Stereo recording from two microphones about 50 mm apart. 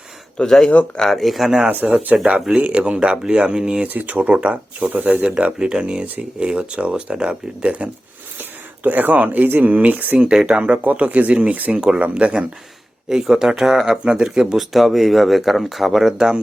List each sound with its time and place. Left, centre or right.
0.3 s speech: centre
1.0 s speech: centre
3.8 s speech: right
5.5 s speech: centre
8.4 s speech: right
10.2 s speech: centre
13.1 s speech: centre
14.7 s speech: centre